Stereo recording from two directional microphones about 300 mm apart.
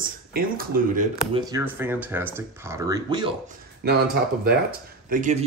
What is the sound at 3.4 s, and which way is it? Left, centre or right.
Speech, right.